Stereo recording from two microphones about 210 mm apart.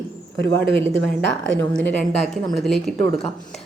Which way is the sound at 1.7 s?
5° left (ahead or behind).